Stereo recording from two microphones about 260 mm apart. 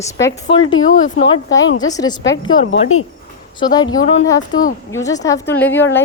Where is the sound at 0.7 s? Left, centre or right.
Left.